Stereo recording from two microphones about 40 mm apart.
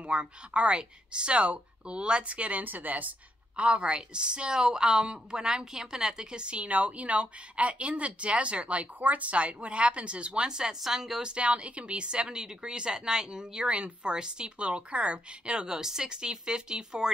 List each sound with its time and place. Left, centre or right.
0.1 s speech: right
2.6 s speech: right
3.5 s a woman's voice: right
13.7 s speech: right